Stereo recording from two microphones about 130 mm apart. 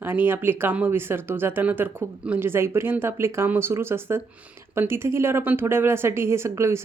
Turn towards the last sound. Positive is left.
turn(degrees=-20)  # may be behind; listen again after turning